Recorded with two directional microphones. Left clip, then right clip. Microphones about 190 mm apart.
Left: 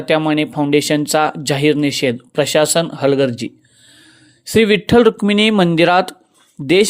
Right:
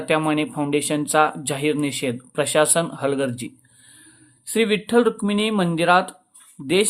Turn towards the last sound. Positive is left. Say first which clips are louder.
# left 7 dB
turn(degrees=35)  # may be behind; listen again after turning